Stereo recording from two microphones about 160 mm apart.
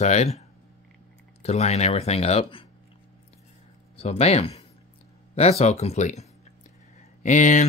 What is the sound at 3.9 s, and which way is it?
Speech, 40° left (ahead or behind).